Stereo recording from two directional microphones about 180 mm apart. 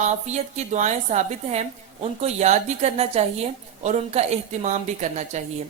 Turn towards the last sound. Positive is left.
turn(degrees=-40)  # may be behind; listen again after turning